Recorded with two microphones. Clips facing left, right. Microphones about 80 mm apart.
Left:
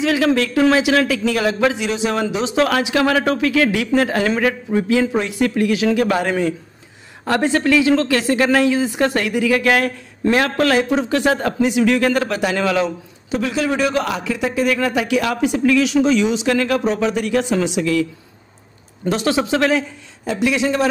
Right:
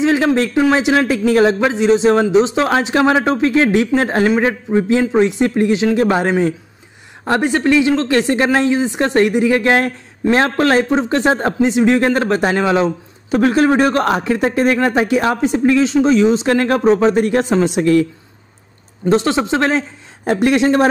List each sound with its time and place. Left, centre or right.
0.0 s speech: right
13.3 s a man's voice: right
17.7 s a man's voice: right
19.0 s speech: right
20.2 s a man's voice: right